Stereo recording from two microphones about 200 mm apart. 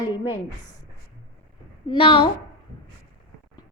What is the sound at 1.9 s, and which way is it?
Speech, 25° left (ahead or behind).